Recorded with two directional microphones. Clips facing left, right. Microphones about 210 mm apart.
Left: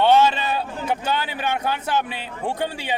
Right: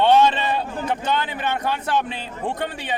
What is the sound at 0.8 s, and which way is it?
Speech, 10° left (ahead or behind).